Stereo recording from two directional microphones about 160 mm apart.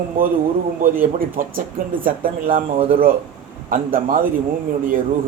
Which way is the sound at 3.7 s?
60° right (ahead or behind).